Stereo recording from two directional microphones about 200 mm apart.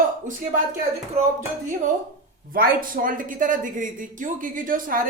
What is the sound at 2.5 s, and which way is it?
Speech, 45° right (ahead or behind).